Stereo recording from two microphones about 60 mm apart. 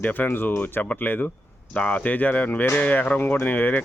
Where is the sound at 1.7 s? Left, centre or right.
Centre.